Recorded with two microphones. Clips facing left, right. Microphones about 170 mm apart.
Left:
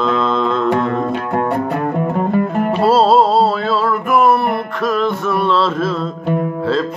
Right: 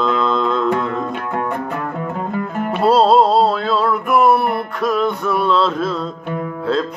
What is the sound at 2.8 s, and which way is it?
Music, 5° left (ahead or behind).